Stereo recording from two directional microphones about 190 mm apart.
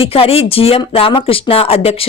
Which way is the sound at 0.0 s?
30° left (ahead or behind).